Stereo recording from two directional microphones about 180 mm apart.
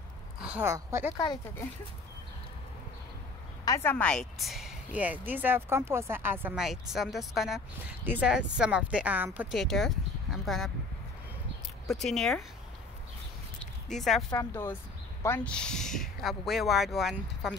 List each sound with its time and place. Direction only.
0.4 s speech: 10° right (ahead or behind)
1.1 s speech: 25° left (ahead or behind)
3.6 s speech: 15° left (ahead or behind)
11.9 s speech: centre (ahead or behind)
13.6 s a sound: centre (ahead or behind)
14.3 s speech: 15° left (ahead or behind); by 17.6 s centre (ahead or behind)